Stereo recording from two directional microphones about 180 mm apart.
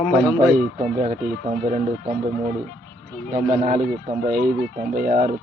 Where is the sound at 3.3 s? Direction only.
50° right (ahead or behind).